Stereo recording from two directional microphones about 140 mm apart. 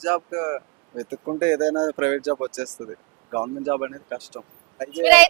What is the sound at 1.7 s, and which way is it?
Speech, 30° right (ahead or behind).